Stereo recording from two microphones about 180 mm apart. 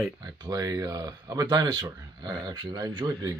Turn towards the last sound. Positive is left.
turn(degrees=-25)  # may be behind; listen again after turning